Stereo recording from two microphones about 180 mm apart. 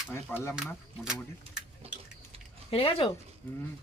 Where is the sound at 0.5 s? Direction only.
5° right (ahead or behind).